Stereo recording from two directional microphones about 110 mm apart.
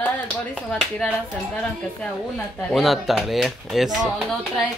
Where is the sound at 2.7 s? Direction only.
Centre (ahead or behind).